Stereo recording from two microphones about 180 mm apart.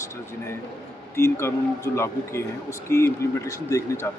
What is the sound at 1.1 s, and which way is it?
Speech, 15° left (ahead or behind).